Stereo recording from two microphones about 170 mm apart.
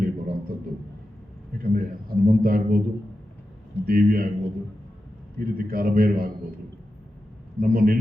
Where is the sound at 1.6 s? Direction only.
55° right (ahead or behind).